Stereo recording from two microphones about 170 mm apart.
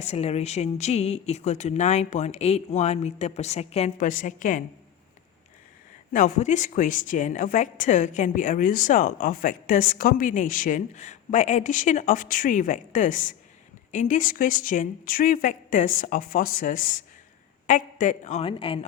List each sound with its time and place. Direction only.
0.0 s speech: 40° left (ahead or behind)
3.9 s a woman's voice: 55° left (ahead or behind)
6.1 s a woman's voice: 50° left (ahead or behind); by 18.9 s 30° left (ahead or behind)